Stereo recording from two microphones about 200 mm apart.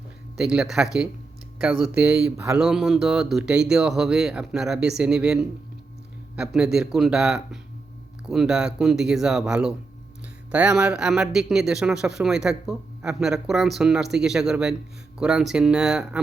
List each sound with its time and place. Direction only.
0.3 s speech: 5° right (ahead or behind)
2.6 s speech: centre (ahead or behind)